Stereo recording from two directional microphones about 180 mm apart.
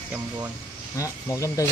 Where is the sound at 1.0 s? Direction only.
15° left (ahead or behind).